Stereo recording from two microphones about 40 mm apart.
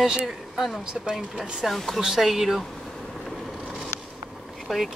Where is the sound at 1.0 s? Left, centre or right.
Centre.